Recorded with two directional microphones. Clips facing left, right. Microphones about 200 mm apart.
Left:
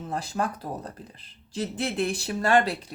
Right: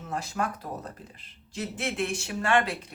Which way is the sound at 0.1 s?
35° left (ahead or behind).